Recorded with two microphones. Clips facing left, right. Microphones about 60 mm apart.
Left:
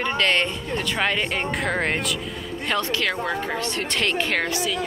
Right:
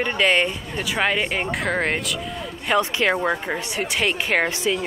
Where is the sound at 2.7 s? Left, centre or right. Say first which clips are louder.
Right 5 dB; centre.